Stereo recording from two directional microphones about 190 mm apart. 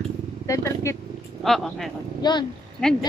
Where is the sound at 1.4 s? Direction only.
Centre (ahead or behind).